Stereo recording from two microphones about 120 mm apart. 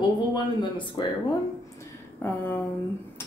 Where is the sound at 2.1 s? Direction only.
15° left (ahead or behind).